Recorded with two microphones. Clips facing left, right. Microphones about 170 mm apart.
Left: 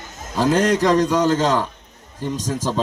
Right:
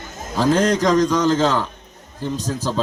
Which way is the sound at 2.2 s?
15° left (ahead or behind).